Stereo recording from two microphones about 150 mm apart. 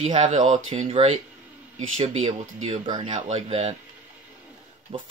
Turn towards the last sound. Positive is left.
turn(degrees=-40)  # may be behind; listen again after turning